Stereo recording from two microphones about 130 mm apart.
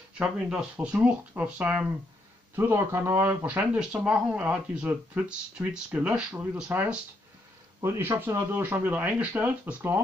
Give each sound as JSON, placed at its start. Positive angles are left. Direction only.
{"t": 0.2, "sound": "speech", "side_deg": -5}